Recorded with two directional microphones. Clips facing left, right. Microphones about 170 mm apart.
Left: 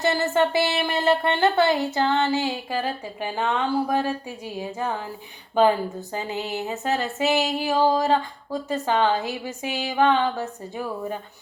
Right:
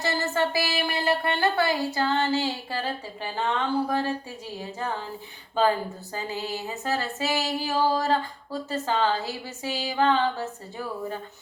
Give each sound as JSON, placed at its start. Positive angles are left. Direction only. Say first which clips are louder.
{"t": 0.0, "sound": "speech", "louder": "left 5 dB", "side_deg": 20}
{"t": 6.1, "sound": "a woman's voice", "louder": "left 2 dB", "side_deg": 20}